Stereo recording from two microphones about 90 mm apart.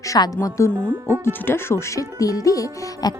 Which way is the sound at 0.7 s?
20° right (ahead or behind).